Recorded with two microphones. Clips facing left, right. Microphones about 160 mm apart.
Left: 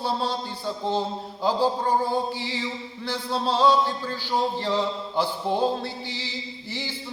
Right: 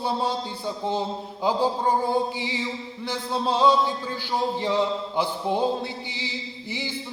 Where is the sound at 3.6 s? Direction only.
15° right (ahead or behind).